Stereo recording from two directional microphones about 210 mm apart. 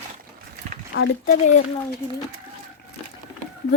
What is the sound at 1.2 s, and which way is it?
Speech, 40° left (ahead or behind).